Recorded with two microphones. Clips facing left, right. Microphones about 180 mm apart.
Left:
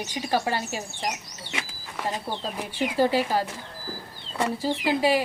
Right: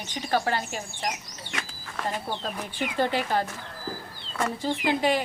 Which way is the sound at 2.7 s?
10° left (ahead or behind).